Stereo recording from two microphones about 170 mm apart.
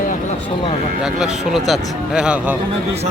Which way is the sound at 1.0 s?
5° right (ahead or behind).